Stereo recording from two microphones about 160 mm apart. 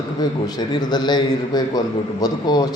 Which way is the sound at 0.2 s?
25° left (ahead or behind).